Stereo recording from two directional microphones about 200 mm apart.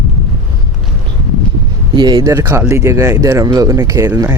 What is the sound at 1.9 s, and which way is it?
Speech, 20° right (ahead or behind).